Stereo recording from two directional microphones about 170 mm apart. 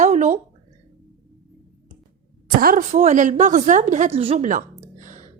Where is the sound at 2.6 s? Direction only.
55° right (ahead or behind).